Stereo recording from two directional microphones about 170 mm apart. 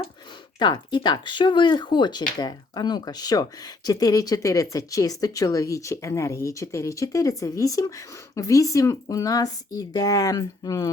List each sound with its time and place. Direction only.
0.6 s speech: 25° left (ahead or behind)